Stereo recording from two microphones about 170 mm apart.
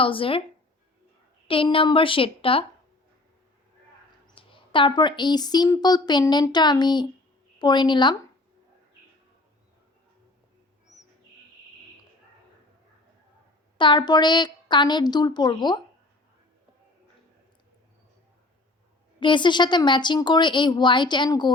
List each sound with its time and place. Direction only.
0.0 s a woman's voice: 30° left (ahead or behind)
1.5 s a woman's voice: 30° left (ahead or behind)
4.4 s a woman's voice: 30° left (ahead or behind)
13.7 s a woman's voice: 25° left (ahead or behind)
19.2 s a woman's voice: 30° left (ahead or behind)